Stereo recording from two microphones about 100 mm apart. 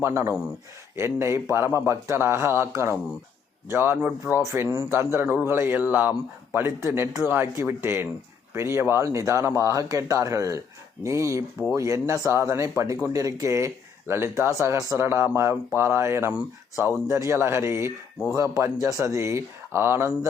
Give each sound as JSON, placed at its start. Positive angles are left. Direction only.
{"t": 0.0, "sound": "a man's voice", "side_deg": -25}